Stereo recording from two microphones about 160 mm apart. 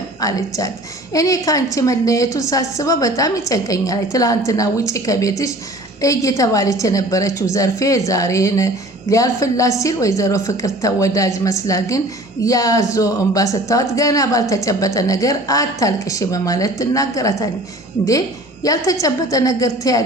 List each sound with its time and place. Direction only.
0.2 s a woman's voice: 20° left (ahead or behind)